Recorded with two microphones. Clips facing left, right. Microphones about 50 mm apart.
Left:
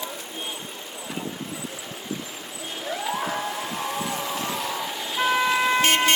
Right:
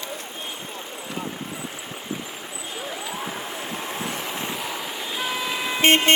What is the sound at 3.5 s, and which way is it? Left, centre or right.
Vehicle, right.